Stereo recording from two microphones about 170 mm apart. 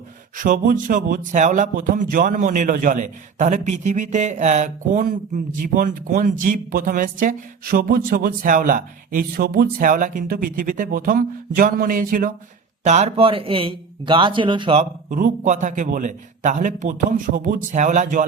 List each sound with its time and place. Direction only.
0.3 s speech: 50° right (ahead or behind)
12.8 s a man's voice: 40° right (ahead or behind)
15.1 s speech: 50° right (ahead or behind)